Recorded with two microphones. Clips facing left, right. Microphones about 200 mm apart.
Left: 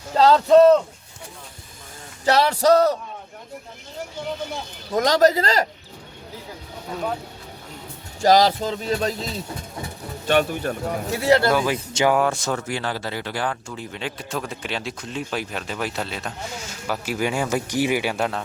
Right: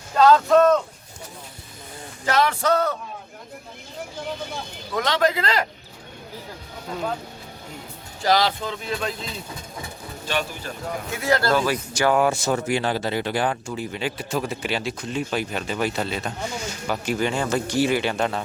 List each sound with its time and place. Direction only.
0.2 s music: 30° left (ahead or behind)
2.2 s music: 35° left (ahead or behind)
4.9 s music: 40° left (ahead or behind)
8.2 s music: 45° left (ahead or behind)
10.2 s speech: 55° left (ahead or behind)
11.1 s speech: 30° left (ahead or behind)
12.1 s speech: 5° right (ahead or behind)
12.5 s speech: 15° right (ahead or behind)
13.7 s speech: 5° right (ahead or behind)